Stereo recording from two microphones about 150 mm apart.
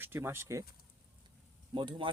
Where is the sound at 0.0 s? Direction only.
15° right (ahead or behind).